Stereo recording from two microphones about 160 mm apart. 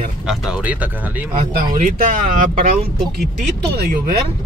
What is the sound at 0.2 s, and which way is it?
Speech, 5° right (ahead or behind).